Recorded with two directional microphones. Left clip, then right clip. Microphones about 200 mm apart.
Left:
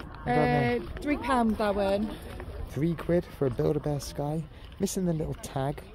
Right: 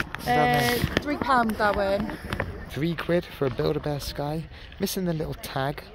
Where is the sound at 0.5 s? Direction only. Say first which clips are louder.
Right 5 dB; 45° left (ahead or behind).